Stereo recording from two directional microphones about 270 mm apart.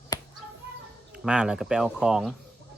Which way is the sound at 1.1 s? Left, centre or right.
Centre.